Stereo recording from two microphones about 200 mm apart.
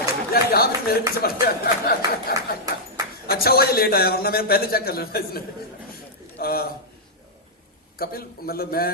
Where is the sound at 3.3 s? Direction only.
50° left (ahead or behind).